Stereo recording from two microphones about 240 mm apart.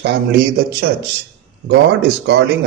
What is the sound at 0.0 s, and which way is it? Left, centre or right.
A man's voice, right.